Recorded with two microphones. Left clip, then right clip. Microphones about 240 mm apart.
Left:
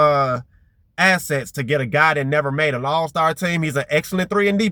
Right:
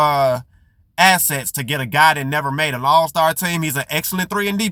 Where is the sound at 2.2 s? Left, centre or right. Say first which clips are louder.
Left 1 dB; right.